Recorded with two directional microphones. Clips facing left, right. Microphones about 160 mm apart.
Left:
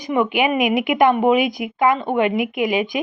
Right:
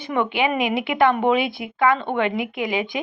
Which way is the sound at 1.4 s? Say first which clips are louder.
Left 4 dB; 30° right (ahead or behind).